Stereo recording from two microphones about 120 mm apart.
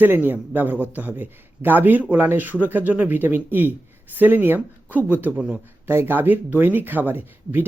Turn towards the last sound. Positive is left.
turn(degrees=-15)  # may be behind; listen again after turning